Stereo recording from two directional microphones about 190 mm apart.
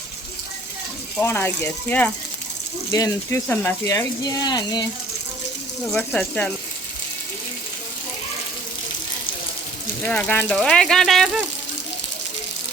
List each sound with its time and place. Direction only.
1.2 s speech: 10° left (ahead or behind)
5.9 s speech: 5° left (ahead or behind)
10.1 s speech: 10° left (ahead or behind)